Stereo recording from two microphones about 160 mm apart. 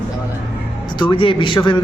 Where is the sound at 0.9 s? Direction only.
30° left (ahead or behind).